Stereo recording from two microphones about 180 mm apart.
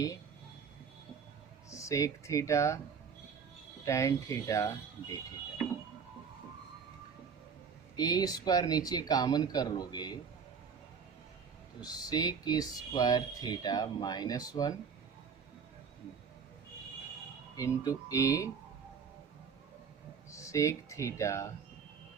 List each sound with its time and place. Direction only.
1.7 s speech: 15° left (ahead or behind)
3.8 s speech: 15° left (ahead or behind)
7.9 s speech: 20° left (ahead or behind)
11.8 s speech: 20° left (ahead or behind)
17.6 s speech: 20° left (ahead or behind)
20.3 s speech: 15° left (ahead or behind)